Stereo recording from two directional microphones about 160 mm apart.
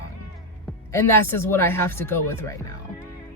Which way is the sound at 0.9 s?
15° left (ahead or behind).